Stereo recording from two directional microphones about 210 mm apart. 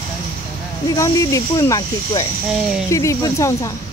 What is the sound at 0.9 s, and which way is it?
Speech, 15° left (ahead or behind).